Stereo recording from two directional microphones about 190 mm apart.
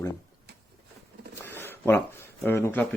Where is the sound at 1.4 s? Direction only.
10° left (ahead or behind).